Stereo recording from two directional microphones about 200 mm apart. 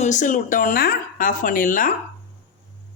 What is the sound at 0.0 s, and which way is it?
Speech, 40° left (ahead or behind).